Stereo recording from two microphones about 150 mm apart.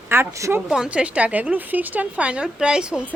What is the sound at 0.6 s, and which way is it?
Speech, 5° right (ahead or behind).